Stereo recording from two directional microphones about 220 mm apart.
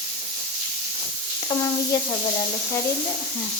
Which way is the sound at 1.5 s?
15° left (ahead or behind).